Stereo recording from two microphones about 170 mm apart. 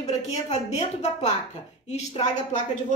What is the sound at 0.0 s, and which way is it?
A woman's voice, 40° left (ahead or behind).